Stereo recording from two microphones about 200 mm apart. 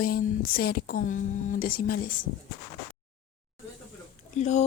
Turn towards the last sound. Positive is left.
turn(degrees=35)  # may be behind; listen again after turning